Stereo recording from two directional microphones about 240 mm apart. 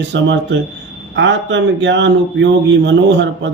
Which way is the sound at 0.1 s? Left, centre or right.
Right.